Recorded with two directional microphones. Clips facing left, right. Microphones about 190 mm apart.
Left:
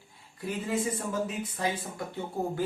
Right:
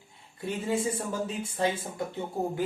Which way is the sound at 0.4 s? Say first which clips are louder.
Right 1 dB; 30° right (ahead or behind).